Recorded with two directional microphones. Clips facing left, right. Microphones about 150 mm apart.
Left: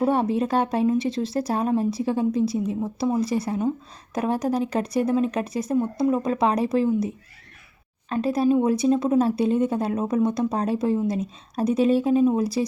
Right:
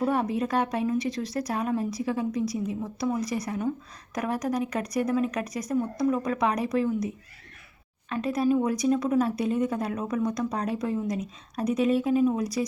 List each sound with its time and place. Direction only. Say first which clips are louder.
0.0 s speech: left 4 dB; 30° left (ahead or behind)
8.1 s speech: left 4 dB; 30° left (ahead or behind)